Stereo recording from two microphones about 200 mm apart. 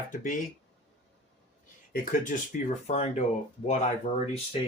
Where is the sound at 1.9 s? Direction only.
40° left (ahead or behind).